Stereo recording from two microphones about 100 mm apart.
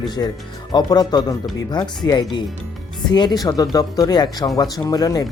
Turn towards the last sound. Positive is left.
turn(degrees=35)  # may be behind; listen again after turning